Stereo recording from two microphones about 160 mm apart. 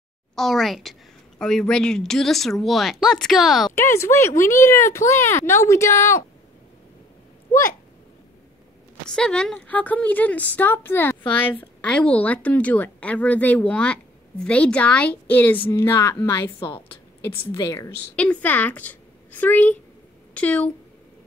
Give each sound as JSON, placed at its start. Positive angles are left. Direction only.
{"t": 0.4, "sound": "speech", "side_deg": 0}
{"t": 3.7, "sound": "speech", "side_deg": 15}
{"t": 9.1, "sound": "a woman's voice", "side_deg": 5}
{"t": 18.1, "sound": "a woman's voice", "side_deg": 10}